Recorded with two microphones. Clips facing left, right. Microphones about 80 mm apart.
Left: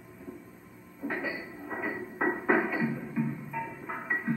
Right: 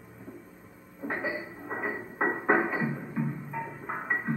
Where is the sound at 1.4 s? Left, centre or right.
Right.